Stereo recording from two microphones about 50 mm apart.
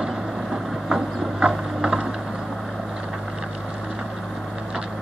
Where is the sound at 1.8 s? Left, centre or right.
Centre.